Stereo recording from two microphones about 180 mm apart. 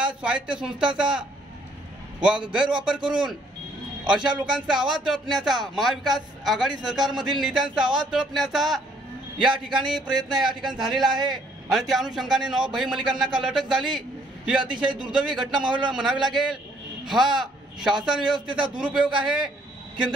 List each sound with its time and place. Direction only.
0.0 s a man's voice: 5° right (ahead or behind)
14.9 s a man's voice: 25° right (ahead or behind)
15.1 s a man's voice: centre (ahead or behind)